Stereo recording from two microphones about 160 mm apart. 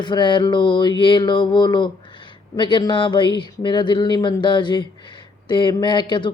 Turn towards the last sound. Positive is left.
turn(degrees=30)  # may be behind; listen again after turning